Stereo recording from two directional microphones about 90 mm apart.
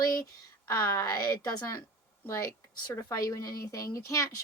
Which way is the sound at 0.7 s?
30° left (ahead or behind).